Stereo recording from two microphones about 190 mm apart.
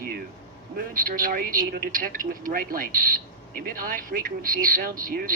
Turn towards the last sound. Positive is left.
turn(degrees=-45)  # may be behind; listen again after turning